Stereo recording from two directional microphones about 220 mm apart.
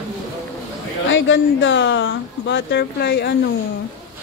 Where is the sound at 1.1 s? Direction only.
60° left (ahead or behind).